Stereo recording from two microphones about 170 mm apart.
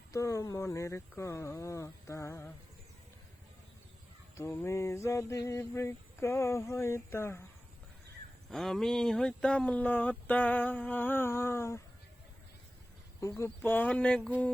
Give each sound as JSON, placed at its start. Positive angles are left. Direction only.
{"t": 0.1, "sound": "speech", "side_deg": 20}
{"t": 4.4, "sound": "speech", "side_deg": 15}
{"t": 8.4, "sound": "speech", "side_deg": 0}
{"t": 13.4, "sound": "speech", "side_deg": 10}